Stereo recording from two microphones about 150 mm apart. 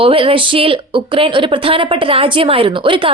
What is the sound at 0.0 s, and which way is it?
Speech, 40° right (ahead or behind).